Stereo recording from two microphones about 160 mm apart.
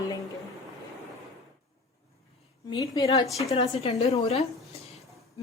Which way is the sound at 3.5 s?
35° left (ahead or behind).